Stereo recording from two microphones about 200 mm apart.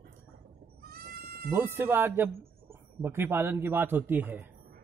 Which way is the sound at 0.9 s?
50° right (ahead or behind).